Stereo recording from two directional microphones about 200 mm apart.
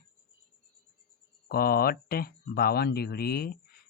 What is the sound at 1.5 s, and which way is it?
Speech, 50° left (ahead or behind).